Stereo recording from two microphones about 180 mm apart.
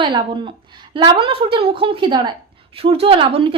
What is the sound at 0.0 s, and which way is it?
A woman's voice, 25° right (ahead or behind).